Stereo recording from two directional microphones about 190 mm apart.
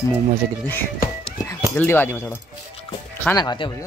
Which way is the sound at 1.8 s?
10° left (ahead or behind).